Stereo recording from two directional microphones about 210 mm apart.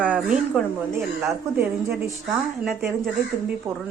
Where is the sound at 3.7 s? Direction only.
10° right (ahead or behind).